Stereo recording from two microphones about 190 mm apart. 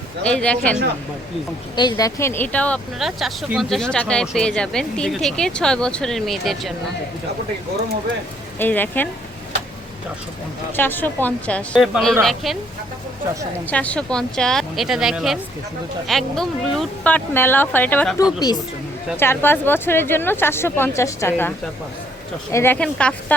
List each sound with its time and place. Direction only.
0.2 s speech: 5° left (ahead or behind)
1.7 s speech: 25° left (ahead or behind); by 6.7 s centre (ahead or behind)
8.5 s speech: 10° left (ahead or behind)
10.8 s speech: 10° left (ahead or behind)
13.7 s speech: 5° left (ahead or behind)
18.3 s speech: 20° left (ahead or behind)
22.5 s speech: 10° left (ahead or behind)